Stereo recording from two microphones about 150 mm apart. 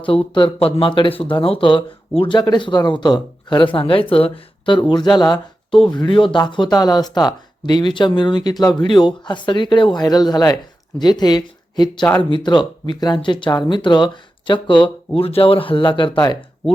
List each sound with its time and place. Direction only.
0.3 s speech: 35° left (ahead or behind)